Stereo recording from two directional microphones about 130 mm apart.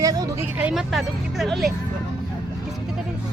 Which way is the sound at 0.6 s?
10° right (ahead or behind).